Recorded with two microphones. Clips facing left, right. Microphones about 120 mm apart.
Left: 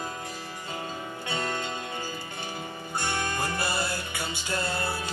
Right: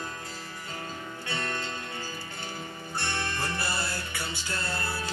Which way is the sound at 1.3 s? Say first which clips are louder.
Left 3 dB; 15° left (ahead or behind).